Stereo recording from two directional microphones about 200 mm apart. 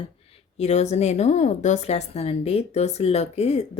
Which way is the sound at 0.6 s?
35° left (ahead or behind).